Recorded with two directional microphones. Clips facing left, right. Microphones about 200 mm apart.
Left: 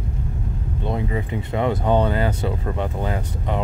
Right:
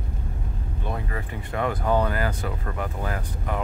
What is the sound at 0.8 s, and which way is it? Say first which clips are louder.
Speech: left 7 dB; 20° left (ahead or behind).